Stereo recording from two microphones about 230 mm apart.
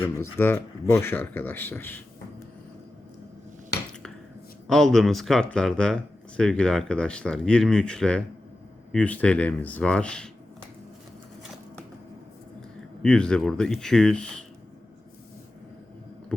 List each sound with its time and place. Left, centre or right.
0.0 s speech: centre
4.7 s speech: centre
13.0 s speech: centre